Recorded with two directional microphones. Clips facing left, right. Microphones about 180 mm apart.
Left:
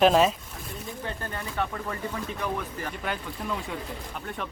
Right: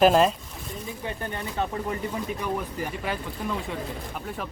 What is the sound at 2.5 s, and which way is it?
Speech, 10° right (ahead or behind).